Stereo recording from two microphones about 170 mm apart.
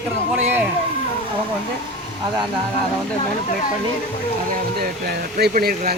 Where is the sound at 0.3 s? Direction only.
10° right (ahead or behind).